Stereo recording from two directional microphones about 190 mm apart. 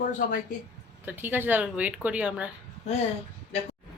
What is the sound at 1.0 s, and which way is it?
A woman's voice, 10° right (ahead or behind).